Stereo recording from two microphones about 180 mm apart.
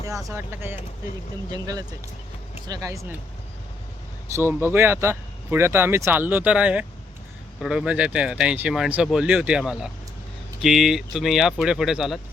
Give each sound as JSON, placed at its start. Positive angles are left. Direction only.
{"t": 0.3, "sound": "speech", "side_deg": -15}
{"t": 4.4, "sound": "speech", "side_deg": -15}